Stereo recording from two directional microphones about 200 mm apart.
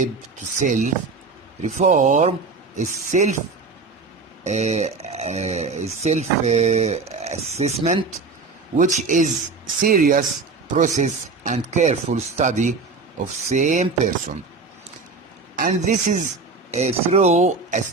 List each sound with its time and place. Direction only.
0.6 s speech: 40° right (ahead or behind)
4.4 s speech: 35° right (ahead or behind)
15.5 s speech: 40° right (ahead or behind)